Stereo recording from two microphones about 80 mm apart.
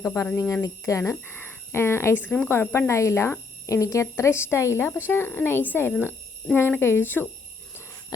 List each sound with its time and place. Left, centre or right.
0.3 s speech: left
1.1 s speech: left
2.2 s speech: left